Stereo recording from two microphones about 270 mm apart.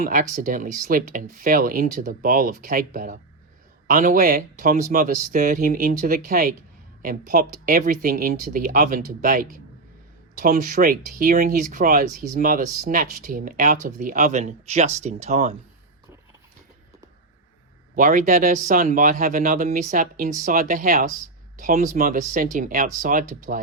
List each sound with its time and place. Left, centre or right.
0.0 s speech: right
17.9 s speech: right